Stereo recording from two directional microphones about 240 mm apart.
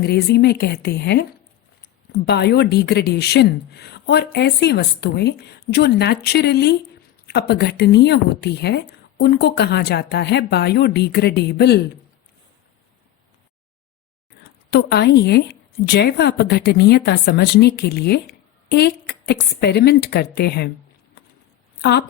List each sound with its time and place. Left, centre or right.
0.0 s speech: left
14.7 s speech: left
21.8 s speech: left